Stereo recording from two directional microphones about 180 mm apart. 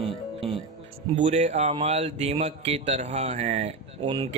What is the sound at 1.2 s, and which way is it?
Speech, 45° right (ahead or behind).